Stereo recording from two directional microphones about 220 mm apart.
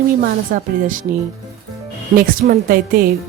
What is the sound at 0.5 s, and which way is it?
Speech, 35° right (ahead or behind).